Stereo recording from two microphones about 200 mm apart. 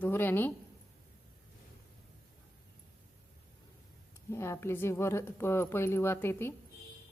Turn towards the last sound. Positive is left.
turn(degrees=10)  # may be behind; listen again after turning